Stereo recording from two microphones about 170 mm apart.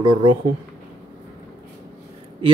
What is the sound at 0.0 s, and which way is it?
Speech, 25° right (ahead or behind).